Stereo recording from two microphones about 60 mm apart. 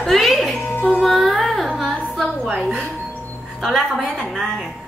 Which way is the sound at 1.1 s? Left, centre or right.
Centre.